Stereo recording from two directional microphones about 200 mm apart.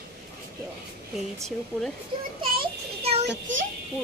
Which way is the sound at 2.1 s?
25° right (ahead or behind).